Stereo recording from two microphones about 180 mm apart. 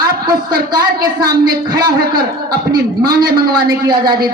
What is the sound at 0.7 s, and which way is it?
A man's voice, 20° right (ahead or behind).